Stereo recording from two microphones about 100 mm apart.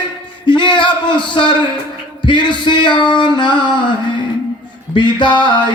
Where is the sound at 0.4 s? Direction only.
55° left (ahead or behind).